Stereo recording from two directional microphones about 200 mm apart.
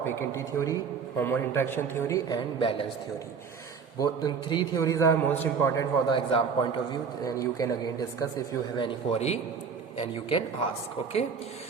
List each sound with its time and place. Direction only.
0.0 s a man's voice: 15° left (ahead or behind)
4.0 s a man's voice: 20° left (ahead or behind)
8.8 s a man's voice: 30° left (ahead or behind)